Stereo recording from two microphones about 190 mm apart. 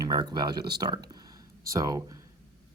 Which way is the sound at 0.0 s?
20° right (ahead or behind).